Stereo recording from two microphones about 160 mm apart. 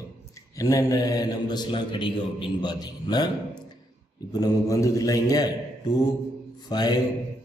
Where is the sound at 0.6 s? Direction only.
20° left (ahead or behind).